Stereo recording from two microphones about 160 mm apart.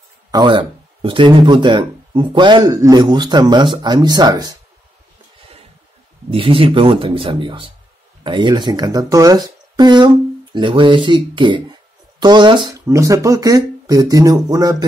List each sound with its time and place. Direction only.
0.3 s speech: 30° right (ahead or behind)
6.3 s speech: 35° right (ahead or behind)
12.7 s speech: 20° right (ahead or behind)